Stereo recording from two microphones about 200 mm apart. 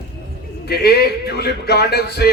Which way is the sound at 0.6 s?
50° left (ahead or behind).